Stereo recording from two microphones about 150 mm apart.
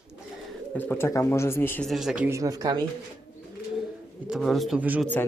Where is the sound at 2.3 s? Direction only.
20° right (ahead or behind).